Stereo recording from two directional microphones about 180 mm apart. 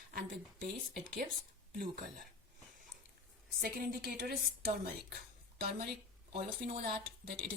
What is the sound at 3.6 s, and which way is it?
Speech, 55° right (ahead or behind).